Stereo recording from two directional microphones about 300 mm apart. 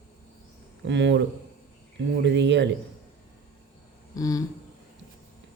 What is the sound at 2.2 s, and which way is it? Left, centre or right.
Speech, right.